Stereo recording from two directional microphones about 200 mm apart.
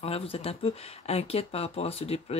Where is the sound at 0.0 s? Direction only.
30° left (ahead or behind).